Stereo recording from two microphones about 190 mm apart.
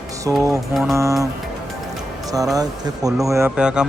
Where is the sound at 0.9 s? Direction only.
15° right (ahead or behind).